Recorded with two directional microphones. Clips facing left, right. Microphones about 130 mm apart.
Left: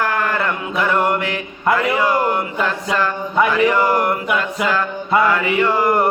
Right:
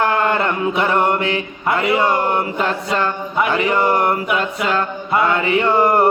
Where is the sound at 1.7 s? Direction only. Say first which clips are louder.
Right 1 dB; 30° right (ahead or behind).